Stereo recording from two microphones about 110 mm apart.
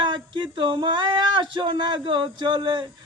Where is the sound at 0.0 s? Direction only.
45° right (ahead or behind).